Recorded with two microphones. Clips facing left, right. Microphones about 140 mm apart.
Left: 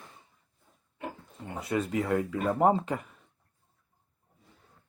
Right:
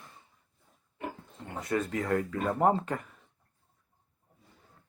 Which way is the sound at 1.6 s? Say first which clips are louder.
Left 1 dB; 10° left (ahead or behind).